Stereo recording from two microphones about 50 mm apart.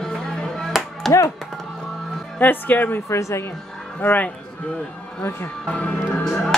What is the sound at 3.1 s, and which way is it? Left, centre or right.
Speech, left.